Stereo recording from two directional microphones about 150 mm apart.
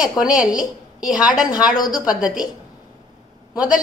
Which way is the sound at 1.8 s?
30° left (ahead or behind).